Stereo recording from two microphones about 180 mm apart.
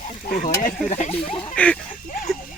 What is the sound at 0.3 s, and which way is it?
Speech, 50° left (ahead or behind).